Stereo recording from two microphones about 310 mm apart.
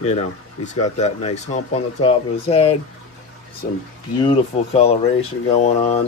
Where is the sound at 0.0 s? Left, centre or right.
Left.